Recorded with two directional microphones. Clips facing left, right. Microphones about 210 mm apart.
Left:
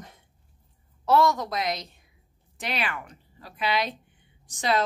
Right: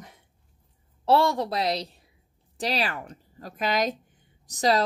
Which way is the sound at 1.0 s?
30° right (ahead or behind).